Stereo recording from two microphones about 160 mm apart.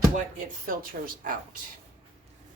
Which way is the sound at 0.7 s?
60° right (ahead or behind).